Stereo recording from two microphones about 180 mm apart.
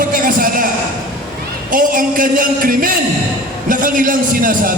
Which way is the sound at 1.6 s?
50° right (ahead or behind).